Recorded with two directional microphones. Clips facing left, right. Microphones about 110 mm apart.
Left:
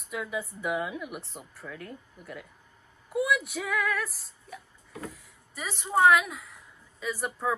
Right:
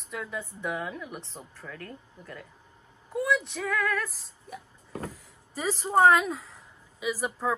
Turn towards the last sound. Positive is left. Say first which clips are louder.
# right 1 dB
turn(degrees=0)  # may be behind; listen again after turning